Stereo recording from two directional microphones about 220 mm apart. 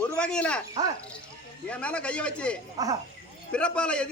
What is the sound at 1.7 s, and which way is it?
Speech, 5° left (ahead or behind).